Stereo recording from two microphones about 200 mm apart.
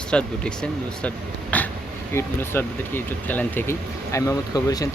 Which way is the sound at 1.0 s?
5° left (ahead or behind).